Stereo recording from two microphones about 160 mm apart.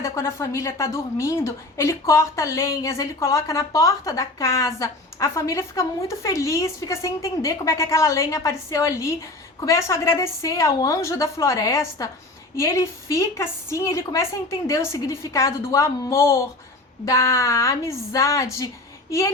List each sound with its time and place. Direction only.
0.0 s a woman's voice: 15° left (ahead or behind)